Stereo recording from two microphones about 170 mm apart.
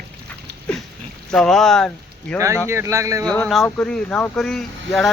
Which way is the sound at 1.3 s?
Centre (ahead or behind).